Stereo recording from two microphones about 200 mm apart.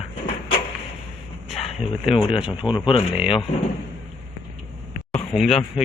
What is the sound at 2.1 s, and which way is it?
Speech, 25° left (ahead or behind).